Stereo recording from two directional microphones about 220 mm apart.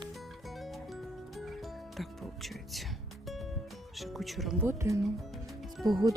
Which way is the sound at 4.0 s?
Centre (ahead or behind).